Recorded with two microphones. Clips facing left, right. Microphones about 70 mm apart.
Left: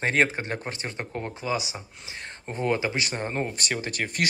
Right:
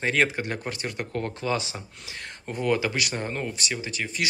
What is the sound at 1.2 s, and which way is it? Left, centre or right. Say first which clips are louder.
Speech: even; centre.